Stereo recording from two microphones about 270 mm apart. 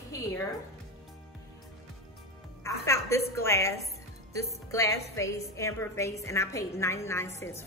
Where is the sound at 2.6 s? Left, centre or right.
Centre.